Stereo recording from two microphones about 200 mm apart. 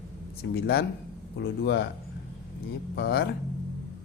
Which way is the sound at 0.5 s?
55° left (ahead or behind).